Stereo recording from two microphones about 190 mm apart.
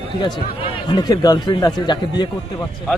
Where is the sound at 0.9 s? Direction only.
20° left (ahead or behind).